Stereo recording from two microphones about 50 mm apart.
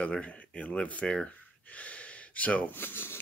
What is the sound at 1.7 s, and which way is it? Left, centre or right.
Gasp, left.